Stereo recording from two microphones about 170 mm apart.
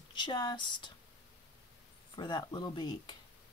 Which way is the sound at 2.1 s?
25° left (ahead or behind).